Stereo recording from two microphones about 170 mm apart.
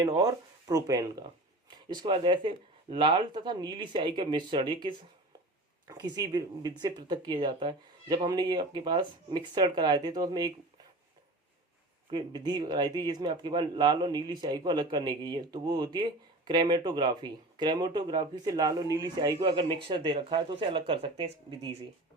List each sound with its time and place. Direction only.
0.0 s speech: 20° right (ahead or behind)
5.9 s speech: 20° right (ahead or behind)
12.1 s speech: 25° right (ahead or behind)